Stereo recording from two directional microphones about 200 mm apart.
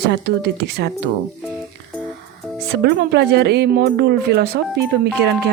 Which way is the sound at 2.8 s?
55° right (ahead or behind).